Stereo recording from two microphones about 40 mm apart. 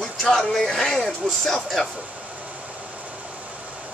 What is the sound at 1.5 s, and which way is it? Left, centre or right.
Speech, centre.